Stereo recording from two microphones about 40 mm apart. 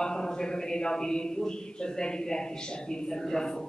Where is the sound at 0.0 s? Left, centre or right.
Centre.